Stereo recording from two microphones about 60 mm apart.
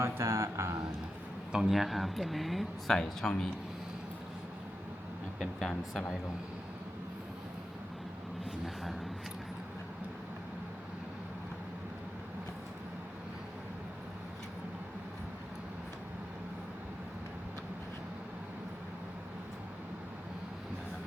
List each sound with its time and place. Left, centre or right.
0.0 s speech: right
1.5 s speech: centre
5.4 s speech: centre
8.6 s speech: centre